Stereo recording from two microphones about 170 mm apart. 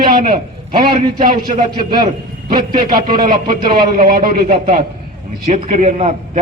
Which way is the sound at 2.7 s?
55° right (ahead or behind).